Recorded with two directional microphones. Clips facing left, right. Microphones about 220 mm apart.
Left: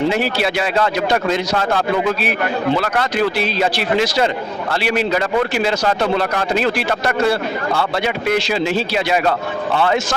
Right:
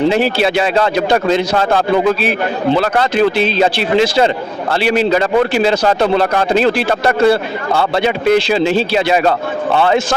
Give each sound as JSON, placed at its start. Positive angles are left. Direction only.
{"t": 0.1, "sound": "speech", "side_deg": -30}